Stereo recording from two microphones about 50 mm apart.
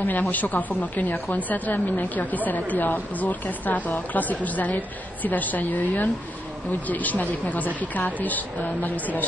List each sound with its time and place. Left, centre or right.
0.0 s a woman's voice: left